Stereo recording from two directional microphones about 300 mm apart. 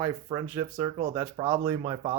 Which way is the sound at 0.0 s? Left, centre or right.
Centre.